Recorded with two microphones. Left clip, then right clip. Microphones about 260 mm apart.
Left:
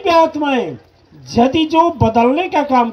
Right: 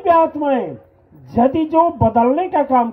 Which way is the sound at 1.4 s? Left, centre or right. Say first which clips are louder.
Left 2 dB; left.